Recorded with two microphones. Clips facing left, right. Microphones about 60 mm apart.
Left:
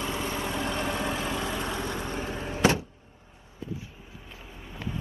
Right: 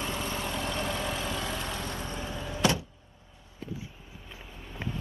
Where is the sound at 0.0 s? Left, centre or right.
Left.